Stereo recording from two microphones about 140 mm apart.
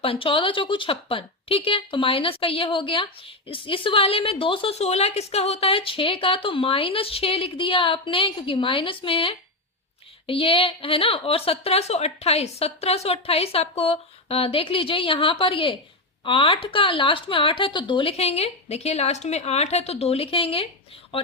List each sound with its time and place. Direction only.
0.0 s a woman's voice: 40° left (ahead or behind)